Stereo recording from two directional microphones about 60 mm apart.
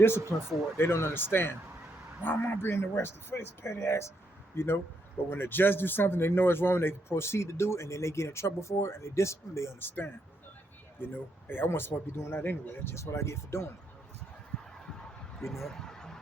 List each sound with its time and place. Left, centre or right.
0.3 s speech: centre
0.8 s speech: left
9.8 s speech: left
14.5 s fowl: centre
15.4 s a sound: centre